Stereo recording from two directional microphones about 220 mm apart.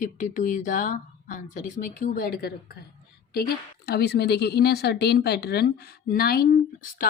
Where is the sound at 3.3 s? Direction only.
45° left (ahead or behind).